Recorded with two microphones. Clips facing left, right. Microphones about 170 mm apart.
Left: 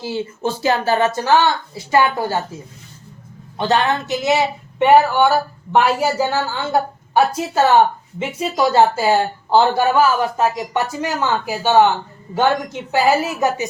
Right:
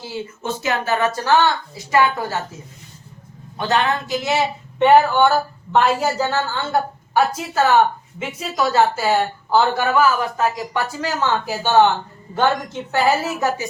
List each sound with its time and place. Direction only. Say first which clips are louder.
0.1 s speech: left 4 dB; 30° left (ahead or behind)
3.6 s speech: left 2 dB; 25° left (ahead or behind); by 11.9 s 10° left (ahead or behind)
12.9 s speech: left 2 dB; 15° left (ahead or behind)